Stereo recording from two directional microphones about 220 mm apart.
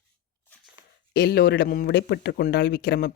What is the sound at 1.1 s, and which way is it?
Speech, 45° left (ahead or behind).